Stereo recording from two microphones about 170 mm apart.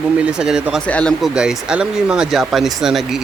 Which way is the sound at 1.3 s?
5° right (ahead or behind).